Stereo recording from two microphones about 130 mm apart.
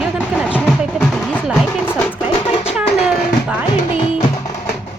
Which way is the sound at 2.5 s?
45° left (ahead or behind).